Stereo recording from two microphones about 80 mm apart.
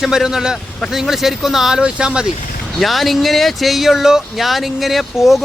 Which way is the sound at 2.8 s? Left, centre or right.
Centre.